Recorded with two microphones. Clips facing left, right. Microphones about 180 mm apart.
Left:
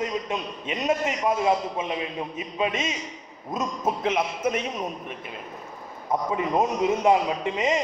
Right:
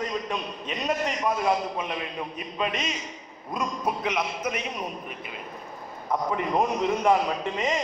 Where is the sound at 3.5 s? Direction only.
25° left (ahead or behind).